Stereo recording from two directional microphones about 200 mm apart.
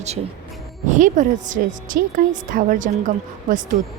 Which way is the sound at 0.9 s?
40° right (ahead or behind).